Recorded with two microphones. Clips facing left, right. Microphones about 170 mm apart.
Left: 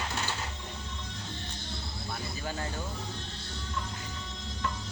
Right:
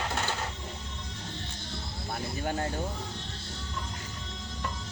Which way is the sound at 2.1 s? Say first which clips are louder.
Right 5 dB; 45° right (ahead or behind).